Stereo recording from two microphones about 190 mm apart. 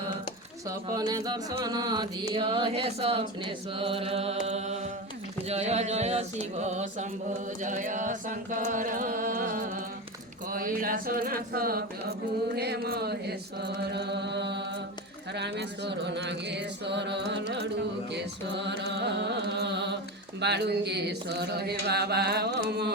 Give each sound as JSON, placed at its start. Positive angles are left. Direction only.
{"t": 0.7, "sound": "speech", "side_deg": -20}
{"t": 4.4, "sound": "music", "side_deg": -35}
{"t": 7.6, "sound": "chant", "side_deg": -40}
{"t": 12.5, "sound": "mantra", "side_deg": -60}
{"t": 18.1, "sound": "music", "side_deg": -65}
{"t": 20.4, "sound": "mantra", "side_deg": -60}